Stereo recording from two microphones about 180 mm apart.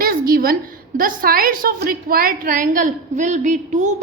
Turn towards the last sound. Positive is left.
turn(degrees=-40)  # may be behind; listen again after turning